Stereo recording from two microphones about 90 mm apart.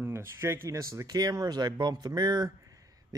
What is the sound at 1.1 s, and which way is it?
Speech, 45° right (ahead or behind).